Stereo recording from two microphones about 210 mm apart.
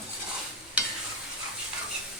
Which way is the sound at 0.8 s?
5° right (ahead or behind).